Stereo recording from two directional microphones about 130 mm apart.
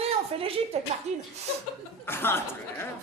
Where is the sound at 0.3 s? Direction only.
45° right (ahead or behind).